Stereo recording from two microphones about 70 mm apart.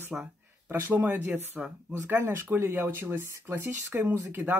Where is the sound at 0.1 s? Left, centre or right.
Centre.